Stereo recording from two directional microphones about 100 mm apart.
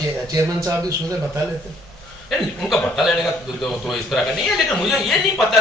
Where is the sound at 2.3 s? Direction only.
Centre (ahead or behind).